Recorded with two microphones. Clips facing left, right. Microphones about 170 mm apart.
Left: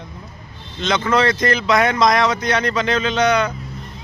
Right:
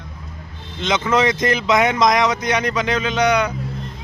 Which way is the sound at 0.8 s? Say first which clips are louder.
Even; 20° right (ahead or behind).